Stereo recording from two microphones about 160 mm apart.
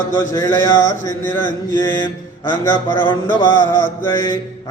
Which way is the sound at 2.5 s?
30° left (ahead or behind).